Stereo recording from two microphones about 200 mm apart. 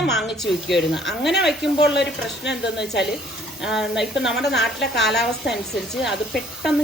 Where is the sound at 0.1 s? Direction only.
Centre (ahead or behind).